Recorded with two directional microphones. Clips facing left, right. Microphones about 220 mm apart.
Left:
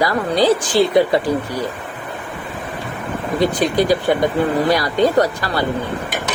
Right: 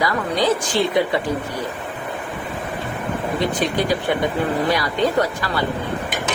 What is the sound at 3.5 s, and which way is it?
Speech, 35° left (ahead or behind).